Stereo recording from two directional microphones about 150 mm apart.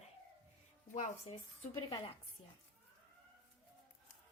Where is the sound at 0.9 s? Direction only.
50° left (ahead or behind).